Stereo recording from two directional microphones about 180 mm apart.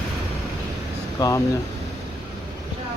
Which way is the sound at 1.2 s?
20° left (ahead or behind).